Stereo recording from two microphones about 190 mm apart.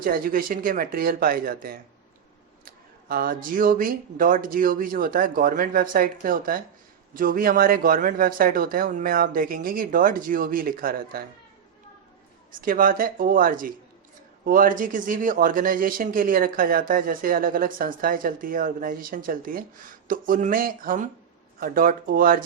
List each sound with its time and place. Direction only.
0.0 s speech: 50° right (ahead or behind)
12.5 s speech: 45° right (ahead or behind)